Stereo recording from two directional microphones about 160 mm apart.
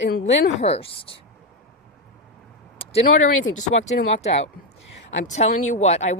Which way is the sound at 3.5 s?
45° left (ahead or behind).